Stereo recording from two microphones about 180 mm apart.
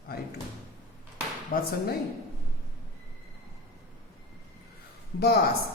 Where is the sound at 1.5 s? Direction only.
60° left (ahead or behind).